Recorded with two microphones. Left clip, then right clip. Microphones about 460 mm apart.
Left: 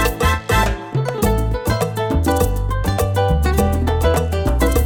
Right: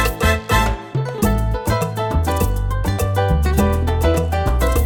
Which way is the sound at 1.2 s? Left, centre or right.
Left.